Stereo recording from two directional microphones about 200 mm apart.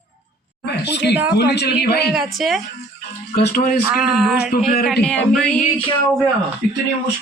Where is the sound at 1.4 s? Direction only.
55° left (ahead or behind).